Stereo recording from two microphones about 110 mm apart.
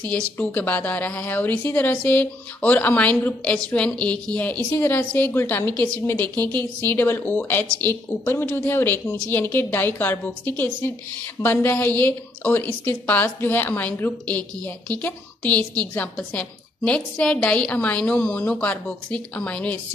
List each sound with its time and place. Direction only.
0.1 s a woman's voice: 15° left (ahead or behind)